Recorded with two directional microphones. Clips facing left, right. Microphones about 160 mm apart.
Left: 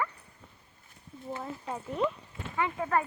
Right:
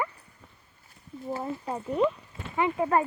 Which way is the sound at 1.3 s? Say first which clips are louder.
Right 5 dB; 35° right (ahead or behind).